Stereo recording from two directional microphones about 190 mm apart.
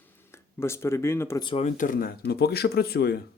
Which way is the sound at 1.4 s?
35° left (ahead or behind).